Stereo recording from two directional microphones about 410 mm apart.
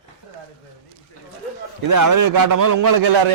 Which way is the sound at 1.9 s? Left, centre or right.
Right.